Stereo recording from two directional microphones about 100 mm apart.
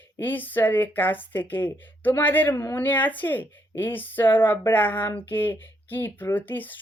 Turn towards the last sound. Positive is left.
turn(degrees=20)  # may be behind; listen again after turning